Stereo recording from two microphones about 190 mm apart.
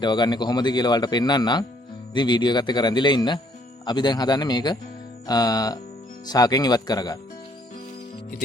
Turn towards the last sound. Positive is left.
turn(degrees=20)  # may be behind; listen again after turning